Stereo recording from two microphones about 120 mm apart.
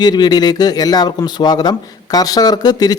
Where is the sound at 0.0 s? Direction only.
35° left (ahead or behind).